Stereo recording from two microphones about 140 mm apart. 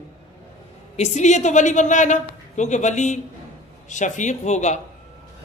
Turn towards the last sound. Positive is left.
turn(degrees=55)  # may be behind; listen again after turning